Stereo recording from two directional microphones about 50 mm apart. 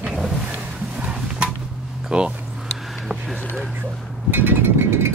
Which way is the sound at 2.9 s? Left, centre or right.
Centre.